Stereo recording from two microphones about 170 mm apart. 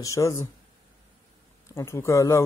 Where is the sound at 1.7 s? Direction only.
15° left (ahead or behind).